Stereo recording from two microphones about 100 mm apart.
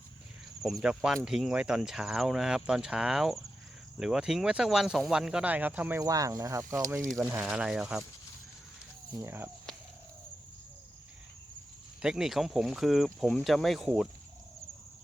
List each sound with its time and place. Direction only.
0.6 s speech: 5° right (ahead or behind)
6.0 s speech: 35° right (ahead or behind)
7.4 s speech: 5° right (ahead or behind)
9.0 s speech: 30° right (ahead or behind)
12.0 s speech: 5° right (ahead or behind)